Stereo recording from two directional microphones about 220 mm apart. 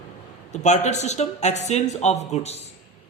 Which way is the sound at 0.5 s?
30° left (ahead or behind).